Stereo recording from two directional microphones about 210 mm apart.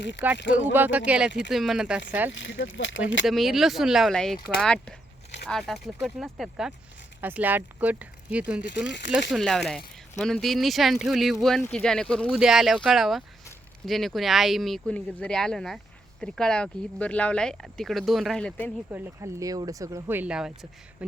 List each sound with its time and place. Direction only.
0.2 s speech: 10° right (ahead or behind)
2.3 s speech: 60° left (ahead or behind)
3.2 s speech: centre (ahead or behind)
8.6 s speech: 55° left (ahead or behind)
9.3 s speech: centre (ahead or behind)
18.9 s speech: 10° right (ahead or behind)